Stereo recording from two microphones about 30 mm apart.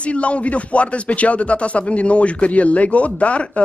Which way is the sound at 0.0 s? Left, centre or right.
Left.